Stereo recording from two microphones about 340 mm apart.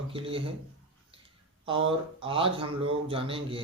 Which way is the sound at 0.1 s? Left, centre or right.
Centre.